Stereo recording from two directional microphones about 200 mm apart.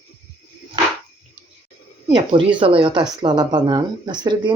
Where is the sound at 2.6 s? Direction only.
25° right (ahead or behind).